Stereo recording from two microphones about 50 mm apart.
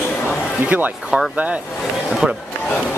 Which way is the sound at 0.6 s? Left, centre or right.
Right.